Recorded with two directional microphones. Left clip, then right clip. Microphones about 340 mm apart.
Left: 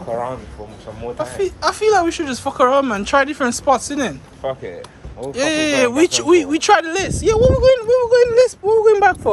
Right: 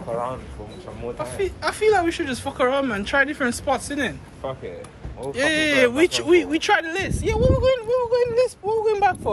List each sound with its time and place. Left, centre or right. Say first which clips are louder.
0.1 s speech: left 4 dB; left
1.1 s speech: left 5 dB; centre
4.4 s speech: left 7 dB; left
5.3 s speech: left 2 dB; centre